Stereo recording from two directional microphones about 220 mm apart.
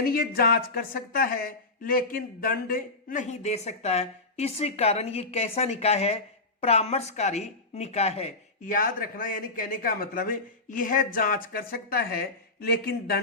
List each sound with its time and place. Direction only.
0.1 s speech: 45° left (ahead or behind)